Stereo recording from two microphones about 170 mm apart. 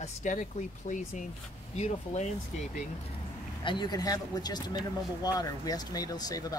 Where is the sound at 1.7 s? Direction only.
40° left (ahead or behind).